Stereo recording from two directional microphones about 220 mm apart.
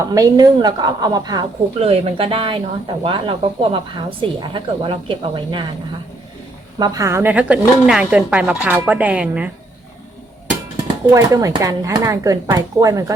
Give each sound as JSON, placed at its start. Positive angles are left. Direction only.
{"t": 0.0, "sound": "a woman's voice", "side_deg": -15}
{"t": 6.7, "sound": "speech", "side_deg": -15}
{"t": 11.0, "sound": "speech", "side_deg": -15}